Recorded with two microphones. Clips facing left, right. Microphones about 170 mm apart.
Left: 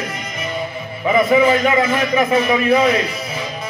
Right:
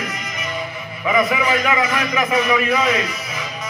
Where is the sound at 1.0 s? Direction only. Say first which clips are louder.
Left 5 dB; 30° left (ahead or behind).